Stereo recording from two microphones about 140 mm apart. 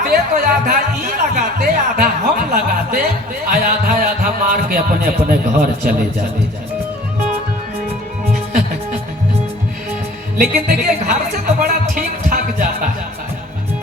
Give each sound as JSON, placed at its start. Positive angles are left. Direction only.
{"t": 0.0, "sound": "music", "side_deg": -90}
{"t": 1.5, "sound": "speech", "side_deg": -90}
{"t": 8.3, "sound": "music", "side_deg": -70}
{"t": 10.3, "sound": "speech", "side_deg": -90}
{"t": 11.6, "sound": "music", "side_deg": -85}